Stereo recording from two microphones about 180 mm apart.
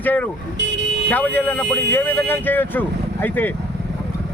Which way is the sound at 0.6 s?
70° right (ahead or behind).